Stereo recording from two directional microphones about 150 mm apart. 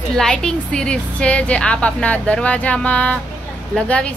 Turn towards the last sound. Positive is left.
turn(degrees=5)  # may be behind; listen again after turning